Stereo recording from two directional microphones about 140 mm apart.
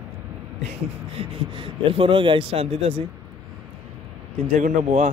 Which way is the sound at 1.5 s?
40° right (ahead or behind).